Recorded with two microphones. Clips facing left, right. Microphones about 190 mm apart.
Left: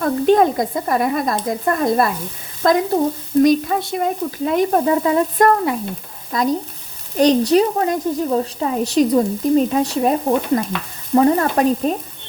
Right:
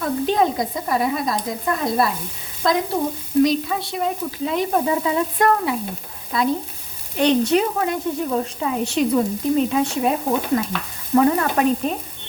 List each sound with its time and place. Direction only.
0.0 s frying: 50° left (ahead or behind)
7.2 s a woman's voice: 35° left (ahead or behind)